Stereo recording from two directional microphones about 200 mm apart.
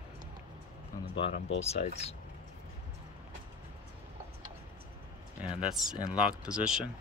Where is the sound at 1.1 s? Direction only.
25° left (ahead or behind).